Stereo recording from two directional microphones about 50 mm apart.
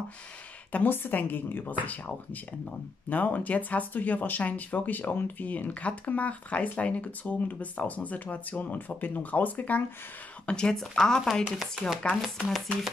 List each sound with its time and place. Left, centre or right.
0.8 s speech: left
10.4 s speech: centre
11.5 s chopping: centre